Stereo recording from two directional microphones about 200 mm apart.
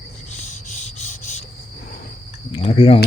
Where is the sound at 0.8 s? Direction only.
35° left (ahead or behind).